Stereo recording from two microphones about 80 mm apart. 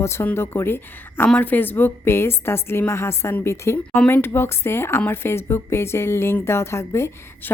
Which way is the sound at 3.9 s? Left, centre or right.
Left.